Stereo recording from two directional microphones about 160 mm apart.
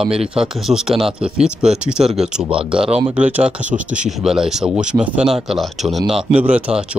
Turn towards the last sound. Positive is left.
turn(degrees=-5)  # may be behind; listen again after turning